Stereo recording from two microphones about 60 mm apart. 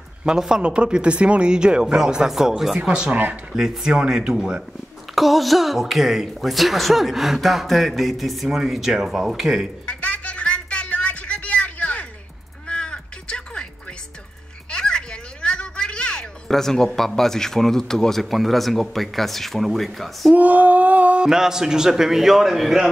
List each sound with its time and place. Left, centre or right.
0.2 s speech: centre
3.1 s speech: right
3.5 s speech: centre
9.8 s a sound: left
16.4 s speech: centre
20.3 s a sound: right
21.3 s speech: centre